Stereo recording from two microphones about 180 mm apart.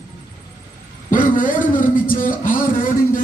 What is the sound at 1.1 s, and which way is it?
A man's voice, 50° left (ahead or behind).